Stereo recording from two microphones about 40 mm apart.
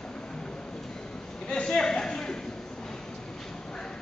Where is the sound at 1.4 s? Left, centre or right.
Centre.